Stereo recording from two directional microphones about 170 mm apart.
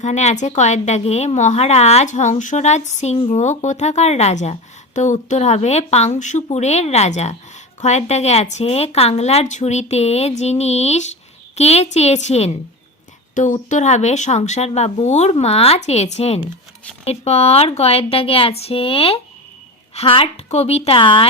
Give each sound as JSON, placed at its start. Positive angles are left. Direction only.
{"t": 0.0, "sound": "a woman's voice", "side_deg": 40}